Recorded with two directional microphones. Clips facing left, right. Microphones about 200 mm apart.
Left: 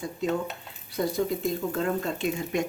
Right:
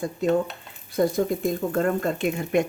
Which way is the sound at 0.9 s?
50° right (ahead or behind).